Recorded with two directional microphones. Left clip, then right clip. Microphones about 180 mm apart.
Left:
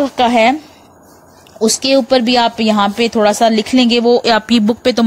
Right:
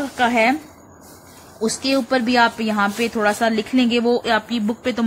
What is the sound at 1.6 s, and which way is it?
A woman's voice, 35° left (ahead or behind).